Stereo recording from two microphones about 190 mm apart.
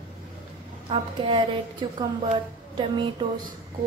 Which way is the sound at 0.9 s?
25° right (ahead or behind).